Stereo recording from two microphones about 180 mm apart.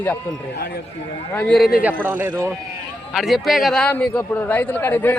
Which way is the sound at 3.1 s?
Centre (ahead or behind).